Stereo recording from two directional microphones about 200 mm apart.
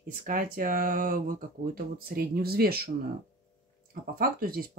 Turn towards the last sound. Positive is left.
turn(degrees=-45)  # may be behind; listen again after turning